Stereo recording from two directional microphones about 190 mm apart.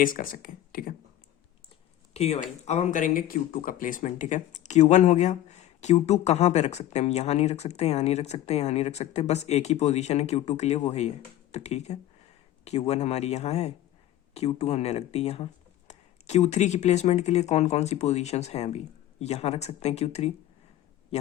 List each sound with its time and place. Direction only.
0.0 s speech: 45° left (ahead or behind)
2.1 s speech: 35° left (ahead or behind)